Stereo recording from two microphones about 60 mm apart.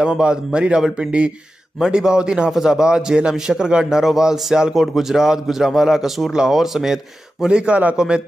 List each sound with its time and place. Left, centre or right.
0.0 s a man's voice: centre